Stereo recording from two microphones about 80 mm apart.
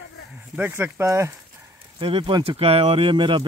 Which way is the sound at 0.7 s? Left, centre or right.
Right.